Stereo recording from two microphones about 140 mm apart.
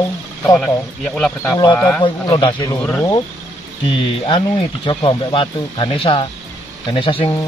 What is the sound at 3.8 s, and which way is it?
Speech, 35° left (ahead or behind).